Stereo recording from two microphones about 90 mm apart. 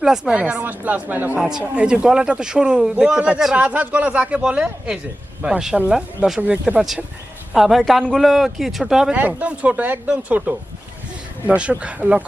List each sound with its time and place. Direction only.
0.0 s speech: 10° right (ahead or behind)
1.4 s speech: 5° right (ahead or behind)
6.7 s a man's voice: 5° right (ahead or behind)
9.1 s speech: 15° right (ahead or behind)